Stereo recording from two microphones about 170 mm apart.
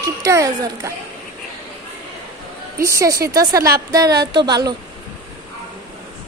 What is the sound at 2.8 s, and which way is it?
A woman's voice, 15° right (ahead or behind).